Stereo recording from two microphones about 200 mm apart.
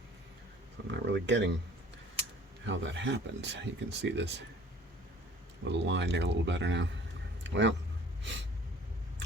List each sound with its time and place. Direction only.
0.9 s speech: 60° right (ahead or behind)
2.6 s speech: 65° right (ahead or behind)
5.6 s speech: 60° right (ahead or behind)
8.2 s gasp: 65° right (ahead or behind)